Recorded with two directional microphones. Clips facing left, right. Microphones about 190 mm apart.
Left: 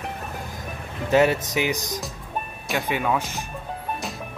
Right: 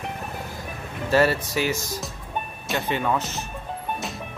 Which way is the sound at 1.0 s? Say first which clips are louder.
Left 1 dB; 20° left (ahead or behind).